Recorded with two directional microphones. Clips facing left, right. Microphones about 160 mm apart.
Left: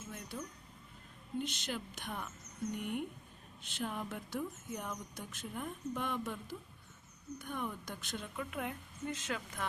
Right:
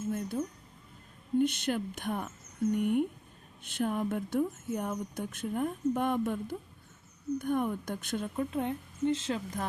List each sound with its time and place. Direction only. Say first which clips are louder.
0.1 s a sound: right 12 dB; 45° right (ahead or behind)
1.4 s speech: right 11 dB; 55° right (ahead or behind)
8.4 s speech: right 8 dB; 30° right (ahead or behind)